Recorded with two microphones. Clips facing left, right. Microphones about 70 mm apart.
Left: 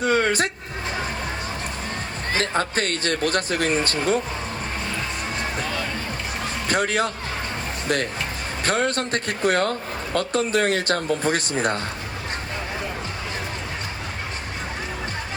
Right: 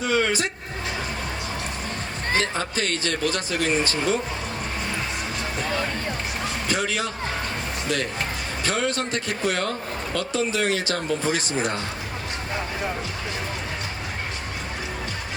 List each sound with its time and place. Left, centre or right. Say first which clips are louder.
0.0 s a sound: left 2 dB; left
2.4 s speech: left 3 dB; left
6.7 s speech: left 5 dB; left
8.6 s speech: left 3 dB; left